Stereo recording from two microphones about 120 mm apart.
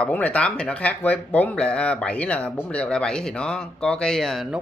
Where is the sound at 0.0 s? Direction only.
10° left (ahead or behind).